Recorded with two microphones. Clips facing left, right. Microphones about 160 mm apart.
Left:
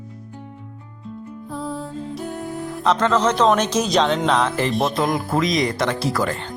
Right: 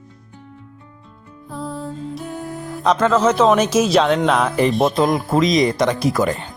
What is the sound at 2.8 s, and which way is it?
Speech, 10° right (ahead or behind).